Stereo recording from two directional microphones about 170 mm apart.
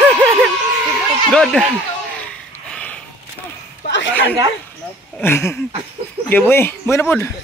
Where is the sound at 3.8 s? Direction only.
90° left.